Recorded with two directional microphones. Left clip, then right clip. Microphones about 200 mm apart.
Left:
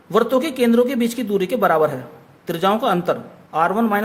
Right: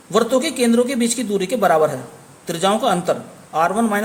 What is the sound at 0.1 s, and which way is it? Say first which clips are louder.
A man's voice: even; 15° left (ahead or behind).